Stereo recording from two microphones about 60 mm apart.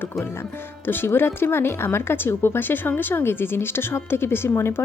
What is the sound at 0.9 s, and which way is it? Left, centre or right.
Speech, left.